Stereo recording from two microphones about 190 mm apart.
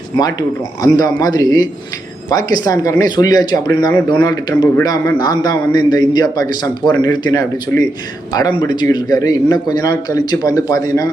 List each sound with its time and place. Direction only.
0.2 s speech: 20° left (ahead or behind)